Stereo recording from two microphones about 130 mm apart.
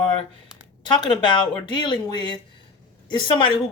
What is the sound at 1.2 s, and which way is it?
A woman's voice, 35° left (ahead or behind).